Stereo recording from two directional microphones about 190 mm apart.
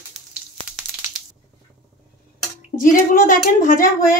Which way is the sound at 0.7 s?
5° right (ahead or behind).